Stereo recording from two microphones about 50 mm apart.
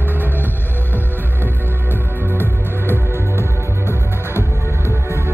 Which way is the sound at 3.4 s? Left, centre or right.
Right.